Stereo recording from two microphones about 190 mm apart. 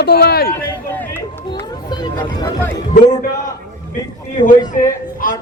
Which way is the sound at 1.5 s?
20° left (ahead or behind).